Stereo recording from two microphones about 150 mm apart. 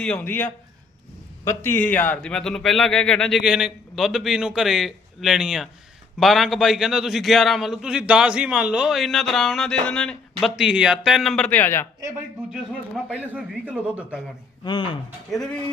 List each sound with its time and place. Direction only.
0.0 s a man's voice: 10° left (ahead or behind)
1.5 s a man's voice: 15° left (ahead or behind)
10.6 s a man's voice: 5° right (ahead or behind); by 11.9 s 15° left (ahead or behind)
13.1 s a man's voice: 10° right (ahead or behind)
14.6 s speech: 30° left (ahead or behind)